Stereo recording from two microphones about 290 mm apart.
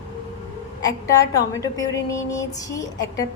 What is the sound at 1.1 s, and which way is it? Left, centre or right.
A woman's voice, centre.